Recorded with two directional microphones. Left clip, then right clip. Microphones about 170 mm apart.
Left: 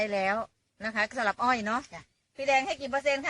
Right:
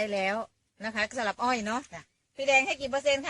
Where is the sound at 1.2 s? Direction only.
25° right (ahead or behind).